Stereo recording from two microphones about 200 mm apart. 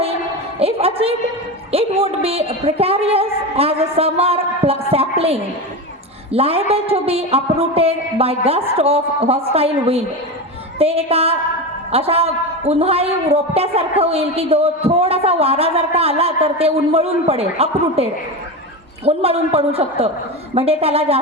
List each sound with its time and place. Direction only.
0.6 s music: 30° right (ahead or behind)
1.7 s a man's voice: 30° right (ahead or behind)